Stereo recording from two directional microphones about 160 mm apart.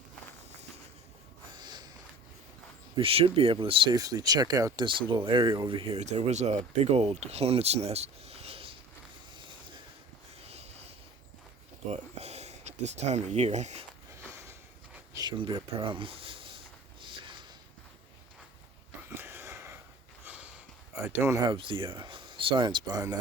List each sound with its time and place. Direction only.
1.5 s snort: 25° right (ahead or behind)
2.9 s speech: 35° right (ahead or behind)
9.3 s a sound: 30° right (ahead or behind)
10.4 s a sound: 40° right (ahead or behind)
11.9 s speech: 40° right (ahead or behind)
15.1 s speech: 25° right (ahead or behind)
17.0 s a sound: 30° right (ahead or behind)
19.1 s wheeze: 15° right (ahead or behind)
20.2 s sniff: 10° right (ahead or behind)
20.9 s speech: 15° right (ahead or behind)
21.4 s speech: 30° right (ahead or behind)